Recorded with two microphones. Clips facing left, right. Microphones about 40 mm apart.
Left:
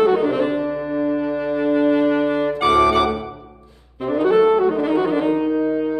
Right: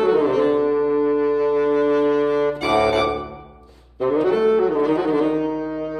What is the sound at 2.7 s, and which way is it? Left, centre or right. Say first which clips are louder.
Organ: left 4 dB; centre.